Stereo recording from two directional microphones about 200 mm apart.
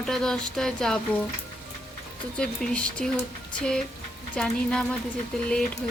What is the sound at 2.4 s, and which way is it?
Speech, 5° left (ahead or behind).